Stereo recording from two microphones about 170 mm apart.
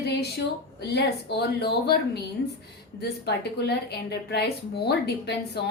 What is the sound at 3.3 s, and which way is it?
A woman's voice, 75° left (ahead or behind).